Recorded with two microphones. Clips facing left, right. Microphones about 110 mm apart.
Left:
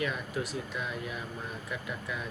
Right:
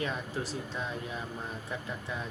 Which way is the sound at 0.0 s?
30° right (ahead or behind).